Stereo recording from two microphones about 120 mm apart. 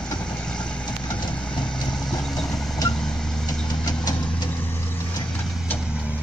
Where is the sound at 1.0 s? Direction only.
40° left (ahead or behind).